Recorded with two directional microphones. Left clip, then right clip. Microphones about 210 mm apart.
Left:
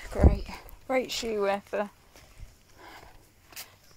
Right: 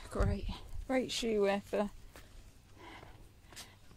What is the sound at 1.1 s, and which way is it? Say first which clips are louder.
Speech: left 4 dB; centre (ahead or behind).